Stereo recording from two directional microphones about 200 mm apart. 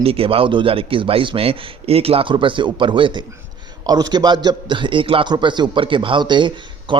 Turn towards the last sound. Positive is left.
turn(degrees=-25)  # may be behind; listen again after turning